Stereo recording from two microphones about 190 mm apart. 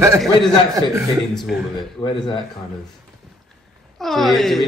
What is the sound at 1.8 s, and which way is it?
Speech, 25° left (ahead or behind).